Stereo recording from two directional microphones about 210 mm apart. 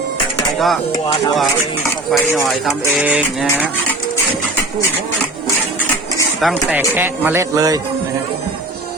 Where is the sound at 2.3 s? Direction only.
Centre (ahead or behind).